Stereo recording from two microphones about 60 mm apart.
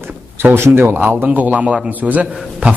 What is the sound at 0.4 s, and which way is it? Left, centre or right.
Speech, right.